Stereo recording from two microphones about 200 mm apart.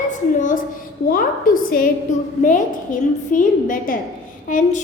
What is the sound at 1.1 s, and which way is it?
A woman's voice, 45° left (ahead or behind).